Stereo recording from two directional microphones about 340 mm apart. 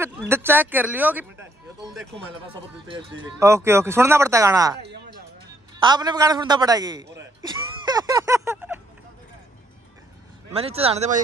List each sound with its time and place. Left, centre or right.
0.0 s speech: centre
2.9 s speech: centre
5.8 s speech: centre
7.2 s a sound: centre
10.5 s speech: centre